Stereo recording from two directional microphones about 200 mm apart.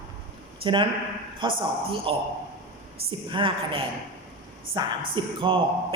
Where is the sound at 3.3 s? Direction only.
25° right (ahead or behind).